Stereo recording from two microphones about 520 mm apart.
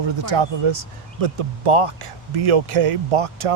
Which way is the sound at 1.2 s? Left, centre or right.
Right.